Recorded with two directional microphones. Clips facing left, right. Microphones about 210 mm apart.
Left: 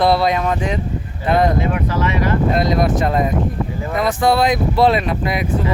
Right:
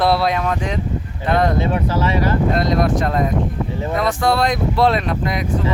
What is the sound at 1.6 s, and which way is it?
Speech, 30° right (ahead or behind).